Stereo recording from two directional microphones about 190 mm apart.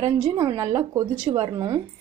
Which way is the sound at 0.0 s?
30° right (ahead or behind).